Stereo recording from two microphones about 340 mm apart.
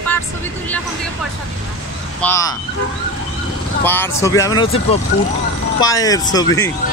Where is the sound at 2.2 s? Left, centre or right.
Centre.